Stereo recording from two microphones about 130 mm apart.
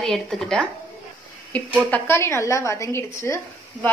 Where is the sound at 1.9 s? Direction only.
20° left (ahead or behind).